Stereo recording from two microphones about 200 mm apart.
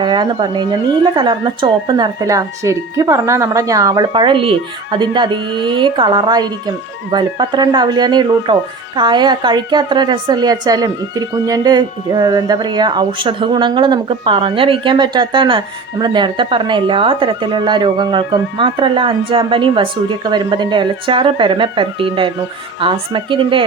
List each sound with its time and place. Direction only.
0.0 s a woman's voice: 20° right (ahead or behind)